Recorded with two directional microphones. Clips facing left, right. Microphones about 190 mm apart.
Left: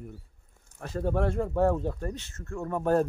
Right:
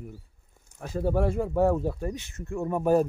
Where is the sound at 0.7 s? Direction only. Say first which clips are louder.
Right 2 dB; 5° right (ahead or behind).